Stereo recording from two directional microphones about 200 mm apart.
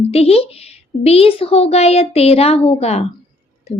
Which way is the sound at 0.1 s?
30° left (ahead or behind).